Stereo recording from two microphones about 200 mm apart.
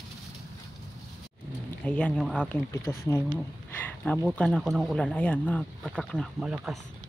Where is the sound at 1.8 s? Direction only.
5° left (ahead or behind).